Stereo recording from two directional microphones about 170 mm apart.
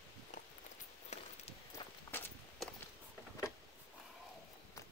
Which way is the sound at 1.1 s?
40° left (ahead or behind).